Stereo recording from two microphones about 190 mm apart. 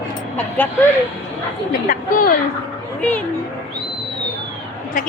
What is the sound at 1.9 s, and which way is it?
Speech, 50° left (ahead or behind).